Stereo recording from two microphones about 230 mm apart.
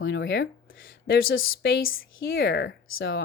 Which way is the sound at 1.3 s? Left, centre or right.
Left.